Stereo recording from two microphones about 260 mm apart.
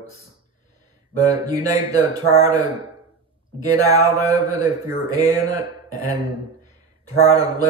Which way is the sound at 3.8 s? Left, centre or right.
Centre.